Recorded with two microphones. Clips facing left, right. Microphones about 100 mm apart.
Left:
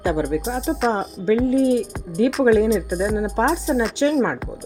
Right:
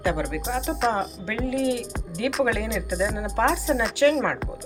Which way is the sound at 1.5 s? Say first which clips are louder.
Left 7 dB; 45° left (ahead or behind).